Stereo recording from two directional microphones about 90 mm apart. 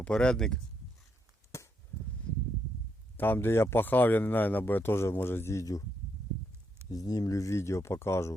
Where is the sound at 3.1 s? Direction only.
20° left (ahead or behind); by 5.8 s 35° left (ahead or behind).